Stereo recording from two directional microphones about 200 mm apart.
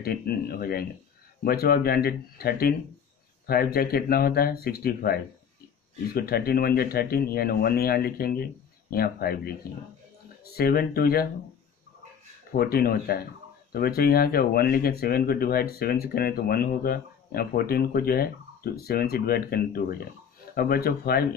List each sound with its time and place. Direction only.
0.0 s speech: 50° left (ahead or behind)
12.5 s speech: 50° left (ahead or behind)